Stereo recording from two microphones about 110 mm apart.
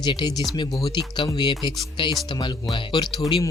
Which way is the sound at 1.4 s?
45° left (ahead or behind).